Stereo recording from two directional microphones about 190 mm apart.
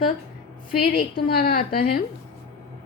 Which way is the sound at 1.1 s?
50° left (ahead or behind).